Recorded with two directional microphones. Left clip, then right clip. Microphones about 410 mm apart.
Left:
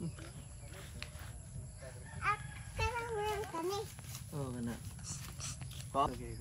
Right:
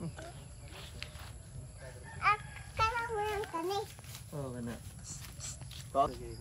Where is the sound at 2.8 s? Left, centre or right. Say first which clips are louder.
Right 5 dB; centre.